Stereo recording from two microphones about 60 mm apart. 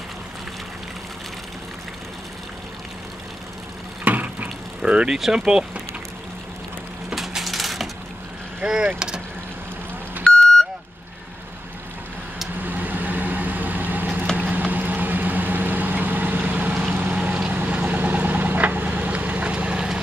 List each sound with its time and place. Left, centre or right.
4.0 s a sound: right
4.8 s speech: centre
7.2 s crushing: centre
8.5 s speech: centre
10.3 s vehicle: centre
12.5 s vehicle: right